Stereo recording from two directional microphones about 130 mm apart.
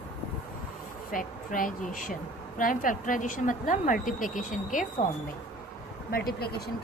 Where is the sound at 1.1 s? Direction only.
90° left.